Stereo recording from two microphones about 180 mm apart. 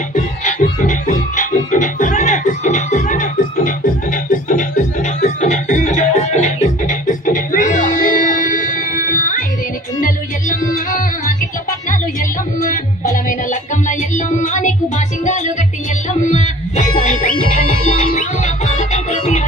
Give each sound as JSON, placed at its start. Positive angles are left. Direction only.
{"t": 0.1, "sound": "music", "side_deg": 45}
{"t": 10.5, "sound": "music", "side_deg": 45}
{"t": 12.5, "sound": "music", "side_deg": 45}